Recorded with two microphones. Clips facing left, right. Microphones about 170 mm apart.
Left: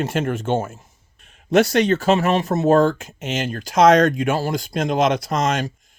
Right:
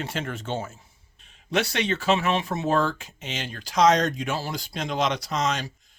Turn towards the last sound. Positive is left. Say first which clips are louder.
# left 6 dB
turn(degrees=50)  # may be behind; listen again after turning